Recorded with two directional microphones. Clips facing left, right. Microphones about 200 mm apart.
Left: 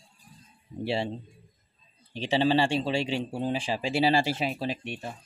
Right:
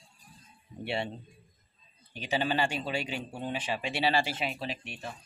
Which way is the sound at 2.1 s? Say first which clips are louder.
Left 6 dB; 30° left (ahead or behind).